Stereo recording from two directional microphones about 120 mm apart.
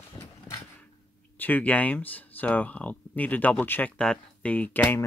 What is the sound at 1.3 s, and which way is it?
Speech, 15° left (ahead or behind).